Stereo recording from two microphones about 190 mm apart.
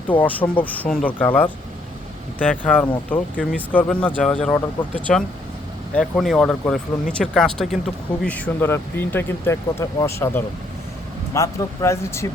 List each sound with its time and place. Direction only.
0.3 s speech: 10° left (ahead or behind)